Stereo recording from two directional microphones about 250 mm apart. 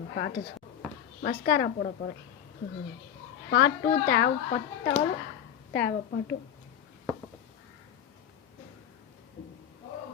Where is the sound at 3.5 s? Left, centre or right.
Left.